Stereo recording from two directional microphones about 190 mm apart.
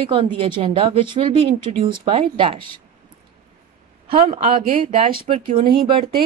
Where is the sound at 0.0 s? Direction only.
25° right (ahead or behind).